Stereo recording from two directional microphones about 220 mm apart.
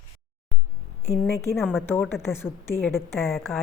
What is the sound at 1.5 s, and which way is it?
Speech, centre (ahead or behind).